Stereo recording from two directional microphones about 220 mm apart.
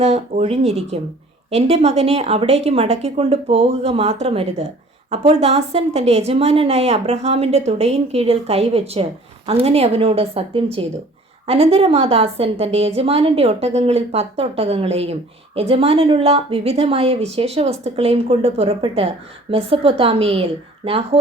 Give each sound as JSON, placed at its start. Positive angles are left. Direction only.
{"t": 0.0, "sound": "a woman's voice", "side_deg": -30}